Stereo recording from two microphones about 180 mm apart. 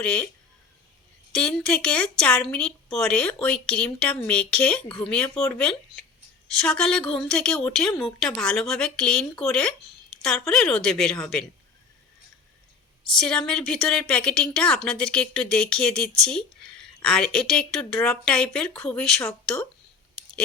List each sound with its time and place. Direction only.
0.0 s speech: 5° left (ahead or behind)
1.3 s speech: 5° left (ahead or behind)
6.5 s speech: 5° left (ahead or behind)
13.1 s speech: 5° left (ahead or behind)